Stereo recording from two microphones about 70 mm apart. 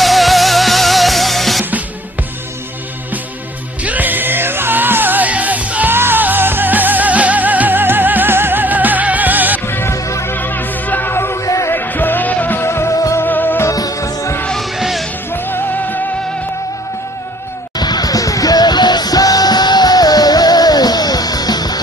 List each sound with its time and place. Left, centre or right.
0.0 s music: centre
3.8 s music: right
5.9 s music: right
9.7 s music: left
9.9 s music: left
10.3 s music: left
11.4 s music: left
11.7 s music: left
12.6 s music: left
13.2 s music: left
13.7 s music: left
14.6 s music: centre
15.3 s music: left
17.7 s music: left